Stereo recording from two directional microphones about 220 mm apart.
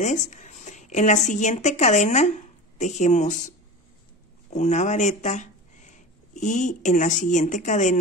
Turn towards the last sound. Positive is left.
turn(degrees=35)  # may be behind; listen again after turning